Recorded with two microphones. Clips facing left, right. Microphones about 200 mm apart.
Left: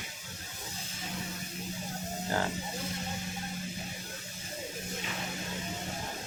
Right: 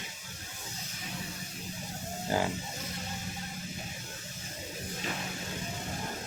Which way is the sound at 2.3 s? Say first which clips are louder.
Right 2 dB; 15° right (ahead or behind).